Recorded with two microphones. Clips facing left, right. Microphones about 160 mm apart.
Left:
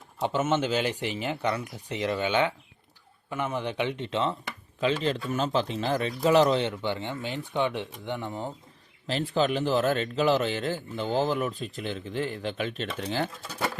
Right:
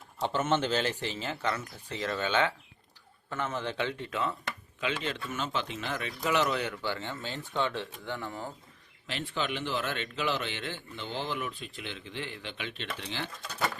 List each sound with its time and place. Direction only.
0.2 s speech: 10° left (ahead or behind)
9.0 s speech: 35° left (ahead or behind)